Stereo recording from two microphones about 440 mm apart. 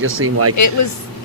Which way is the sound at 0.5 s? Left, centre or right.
Left.